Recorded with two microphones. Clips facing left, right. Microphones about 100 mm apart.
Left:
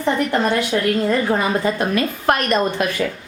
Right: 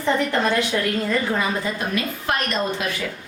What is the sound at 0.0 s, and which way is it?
Speech, 20° left (ahead or behind).